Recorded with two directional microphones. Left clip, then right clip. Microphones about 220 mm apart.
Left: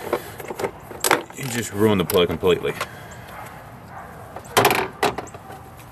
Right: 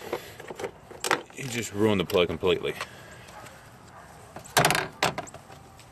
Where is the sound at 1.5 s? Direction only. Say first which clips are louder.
Left 5 dB; 25° right (ahead or behind).